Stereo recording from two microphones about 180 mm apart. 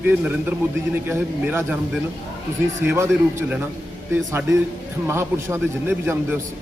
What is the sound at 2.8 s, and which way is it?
Speech, 15° right (ahead or behind).